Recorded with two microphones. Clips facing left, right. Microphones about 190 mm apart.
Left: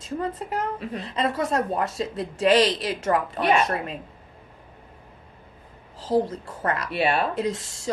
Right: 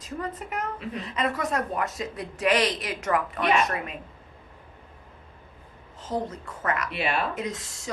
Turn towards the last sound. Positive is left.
turn(degrees=30)  # may be behind; listen again after turning